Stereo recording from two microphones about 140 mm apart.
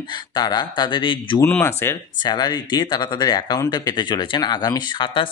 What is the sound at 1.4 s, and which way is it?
Speech, 15° left (ahead or behind).